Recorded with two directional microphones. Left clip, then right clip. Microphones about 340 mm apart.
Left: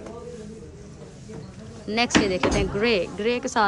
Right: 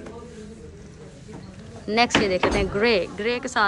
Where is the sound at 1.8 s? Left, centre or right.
Centre.